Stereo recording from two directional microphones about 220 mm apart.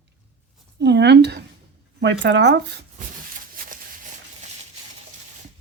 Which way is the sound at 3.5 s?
40° right (ahead or behind).